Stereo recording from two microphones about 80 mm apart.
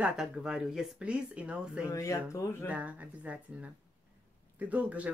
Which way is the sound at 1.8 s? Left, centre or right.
Left.